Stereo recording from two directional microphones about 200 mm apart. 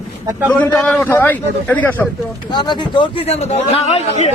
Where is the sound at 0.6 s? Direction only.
5° left (ahead or behind).